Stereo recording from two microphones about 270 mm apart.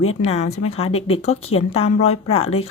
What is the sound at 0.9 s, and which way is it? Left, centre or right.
Speech, left.